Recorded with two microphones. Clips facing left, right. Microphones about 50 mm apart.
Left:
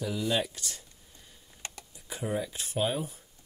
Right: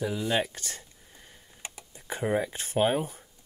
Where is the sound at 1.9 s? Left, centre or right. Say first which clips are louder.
Right 5 dB; right.